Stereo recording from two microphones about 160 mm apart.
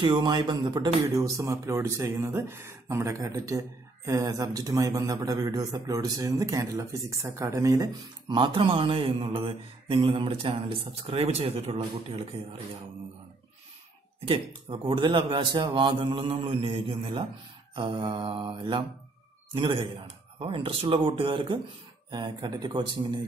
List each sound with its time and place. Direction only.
0.0 s speech: 30° right (ahead or behind)
14.2 s speech: 35° right (ahead or behind)